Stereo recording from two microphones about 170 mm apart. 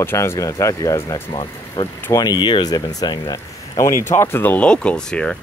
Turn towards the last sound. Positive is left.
turn(degrees=5)  # may be behind; listen again after turning